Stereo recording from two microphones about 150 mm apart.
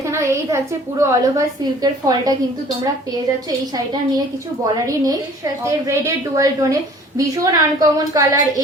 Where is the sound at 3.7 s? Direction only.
25° right (ahead or behind).